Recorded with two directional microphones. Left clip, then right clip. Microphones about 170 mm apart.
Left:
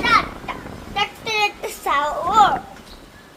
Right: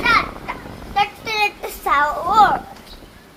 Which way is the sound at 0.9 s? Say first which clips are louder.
Right 2 dB; 5° left (ahead or behind).